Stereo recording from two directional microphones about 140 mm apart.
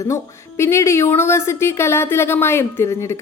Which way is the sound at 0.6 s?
20° left (ahead or behind).